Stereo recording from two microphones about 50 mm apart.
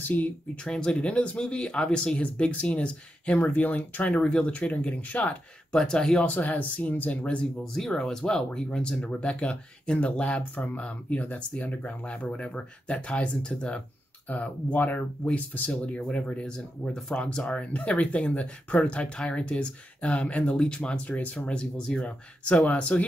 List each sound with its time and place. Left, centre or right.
0.0 s speech: left
0.7 s speech: centre
3.3 s speech: left
5.8 s speech: centre
6.2 s speech: left
8.0 s speech: centre
14.3 s speech: left
21.5 s speech: centre
22.0 s speech: left